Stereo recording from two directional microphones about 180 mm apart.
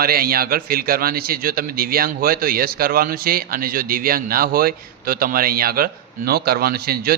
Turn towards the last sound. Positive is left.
turn(degrees=-60)  # may be behind; listen again after turning